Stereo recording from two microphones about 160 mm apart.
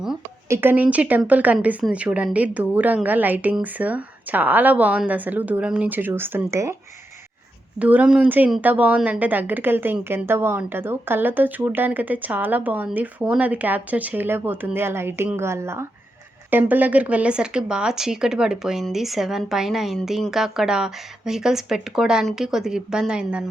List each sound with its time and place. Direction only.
0.4 s speech: 15° right (ahead or behind)
7.8 s a woman's voice: 10° right (ahead or behind)